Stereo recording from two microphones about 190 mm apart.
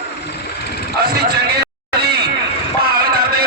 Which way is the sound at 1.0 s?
55° right (ahead or behind).